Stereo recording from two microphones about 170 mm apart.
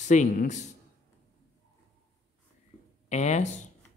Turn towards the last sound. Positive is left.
turn(degrees=40)  # may be behind; listen again after turning